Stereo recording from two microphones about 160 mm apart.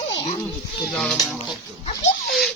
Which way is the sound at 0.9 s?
5° left (ahead or behind).